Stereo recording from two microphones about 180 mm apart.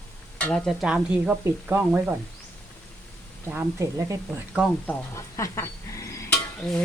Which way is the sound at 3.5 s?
15° right (ahead or behind).